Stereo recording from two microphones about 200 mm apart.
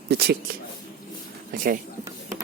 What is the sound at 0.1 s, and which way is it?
Speech, 50° right (ahead or behind).